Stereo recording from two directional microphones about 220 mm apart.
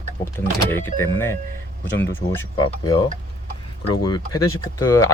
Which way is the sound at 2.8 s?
20° left (ahead or behind).